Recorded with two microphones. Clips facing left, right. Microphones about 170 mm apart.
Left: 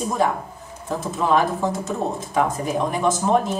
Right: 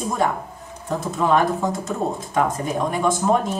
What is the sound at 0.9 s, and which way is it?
Speech, centre (ahead or behind).